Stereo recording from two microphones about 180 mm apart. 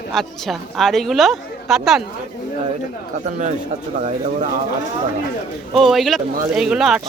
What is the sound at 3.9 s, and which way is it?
Speech, 40° right (ahead or behind).